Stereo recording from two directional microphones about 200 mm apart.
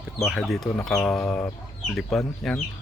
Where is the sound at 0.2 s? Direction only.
Centre (ahead or behind).